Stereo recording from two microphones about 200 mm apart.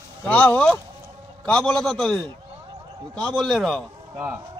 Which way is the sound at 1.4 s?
5° left (ahead or behind).